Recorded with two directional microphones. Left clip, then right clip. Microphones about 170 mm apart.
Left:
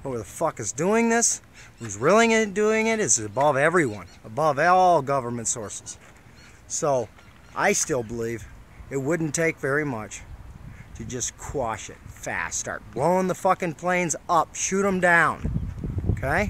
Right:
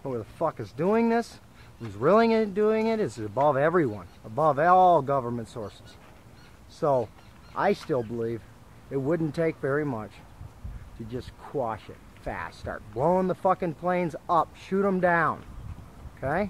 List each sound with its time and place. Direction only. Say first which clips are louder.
0.0 s speech: left 2 dB; 20° left (ahead or behind)
6.8 s speech: left 1 dB; 10° left (ahead or behind)